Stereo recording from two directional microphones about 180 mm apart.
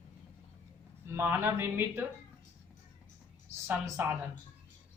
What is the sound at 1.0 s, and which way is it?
A woman's voice, 15° right (ahead or behind).